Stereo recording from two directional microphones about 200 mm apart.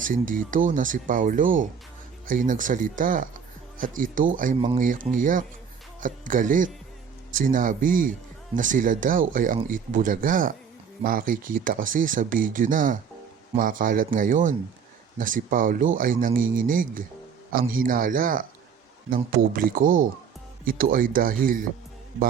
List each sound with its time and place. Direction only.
0.0 s speech: 45° right (ahead or behind)